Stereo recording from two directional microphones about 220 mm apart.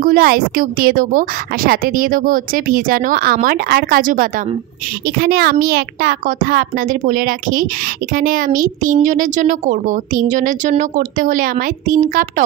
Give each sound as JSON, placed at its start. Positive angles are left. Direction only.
{"t": 0.0, "sound": "a woman's voice", "side_deg": -40}